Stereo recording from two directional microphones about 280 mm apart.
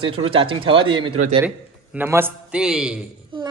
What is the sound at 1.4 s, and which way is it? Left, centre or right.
A man's voice, centre.